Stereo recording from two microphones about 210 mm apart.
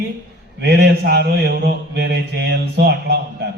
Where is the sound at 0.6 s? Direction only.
50° right (ahead or behind).